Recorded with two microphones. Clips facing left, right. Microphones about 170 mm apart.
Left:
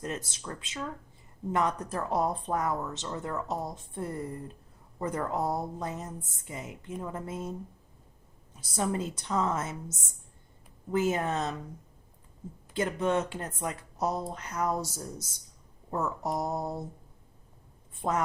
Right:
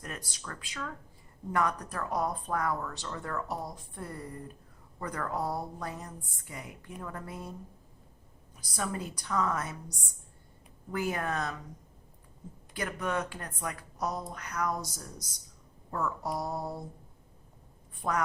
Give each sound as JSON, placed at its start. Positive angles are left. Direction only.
{"t": 0.0, "sound": "speech", "side_deg": 25}
{"t": 8.5, "sound": "speech", "side_deg": 25}
{"t": 12.7, "sound": "speech", "side_deg": 25}
{"t": 17.9, "sound": "writing", "side_deg": 25}